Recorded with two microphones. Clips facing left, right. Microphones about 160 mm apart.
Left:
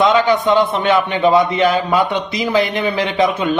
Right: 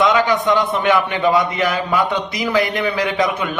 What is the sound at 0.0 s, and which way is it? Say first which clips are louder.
A man's voice: left 2 dB; 30° left (ahead or behind).